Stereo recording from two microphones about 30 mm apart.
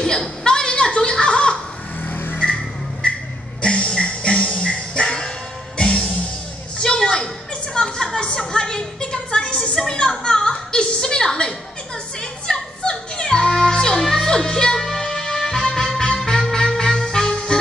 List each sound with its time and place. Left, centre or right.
0.0 s a sound: left
0.7 s a sound: left
1.1 s laughter: left
2.0 s vehicle: left
2.4 s vehicle: left
3.6 s music: left
5.0 s music: left
6.8 s a sound: left
12.2 s music: left
14.8 s music: centre